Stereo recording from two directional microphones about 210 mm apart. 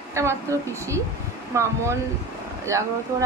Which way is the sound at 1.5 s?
15° right (ahead or behind).